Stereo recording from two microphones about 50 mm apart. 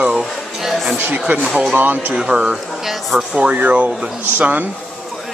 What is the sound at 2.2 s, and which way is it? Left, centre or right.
Speech, right.